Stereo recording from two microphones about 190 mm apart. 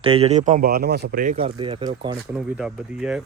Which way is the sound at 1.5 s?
25° right (ahead or behind).